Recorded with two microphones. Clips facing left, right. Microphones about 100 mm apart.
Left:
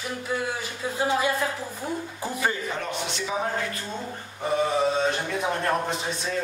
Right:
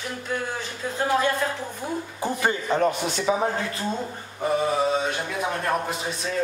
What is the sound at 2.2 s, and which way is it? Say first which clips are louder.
Speech: right 3 dB; 20° right (ahead or behind).